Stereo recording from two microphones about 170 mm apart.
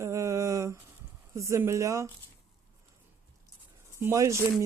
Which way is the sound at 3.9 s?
15° right (ahead or behind).